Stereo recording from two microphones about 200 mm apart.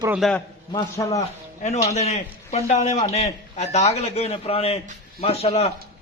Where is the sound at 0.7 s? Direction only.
15° left (ahead or behind).